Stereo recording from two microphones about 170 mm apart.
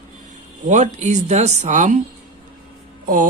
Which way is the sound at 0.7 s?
45° right (ahead or behind).